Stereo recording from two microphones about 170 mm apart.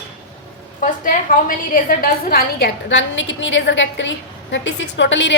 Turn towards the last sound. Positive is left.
turn(degrees=90)